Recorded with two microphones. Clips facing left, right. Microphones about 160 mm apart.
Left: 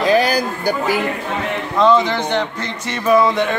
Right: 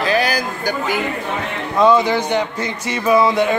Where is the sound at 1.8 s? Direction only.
10° right (ahead or behind).